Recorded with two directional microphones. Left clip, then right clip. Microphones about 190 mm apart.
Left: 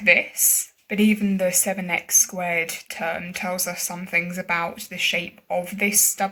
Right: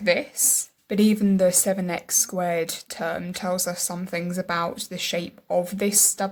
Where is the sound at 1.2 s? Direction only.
30° right (ahead or behind).